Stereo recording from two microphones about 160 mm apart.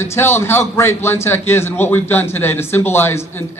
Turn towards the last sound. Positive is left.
turn(degrees=15)  # may be behind; listen again after turning